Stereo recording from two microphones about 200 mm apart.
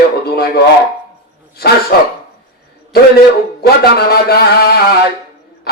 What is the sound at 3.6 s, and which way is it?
Speech, 50° left (ahead or behind).